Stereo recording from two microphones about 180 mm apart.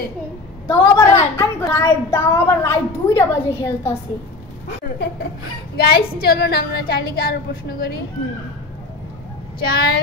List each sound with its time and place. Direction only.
0.7 s a woman's voice: 15° left (ahead or behind)
5.8 s a woman's voice: 60° left (ahead or behind)
9.6 s a woman's voice: 60° left (ahead or behind)